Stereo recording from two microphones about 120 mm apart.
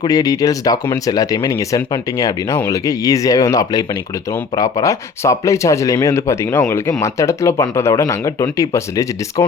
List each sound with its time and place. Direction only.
0.0 s speech: 30° left (ahead or behind)